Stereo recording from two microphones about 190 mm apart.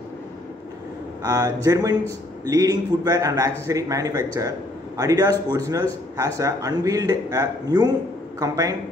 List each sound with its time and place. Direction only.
1.2 s a man's voice: 20° right (ahead or behind)